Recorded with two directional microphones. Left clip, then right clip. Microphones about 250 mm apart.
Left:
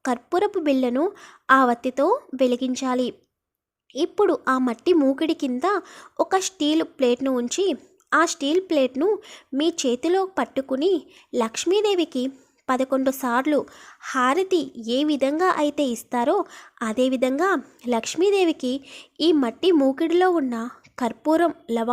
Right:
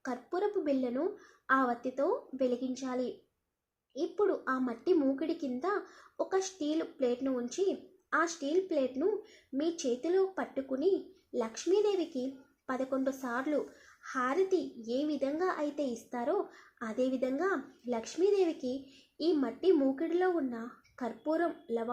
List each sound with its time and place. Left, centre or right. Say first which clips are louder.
0.0 s a woman's voice: left 12 dB; left